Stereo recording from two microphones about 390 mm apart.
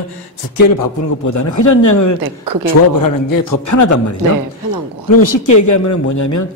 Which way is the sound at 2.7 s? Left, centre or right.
Left.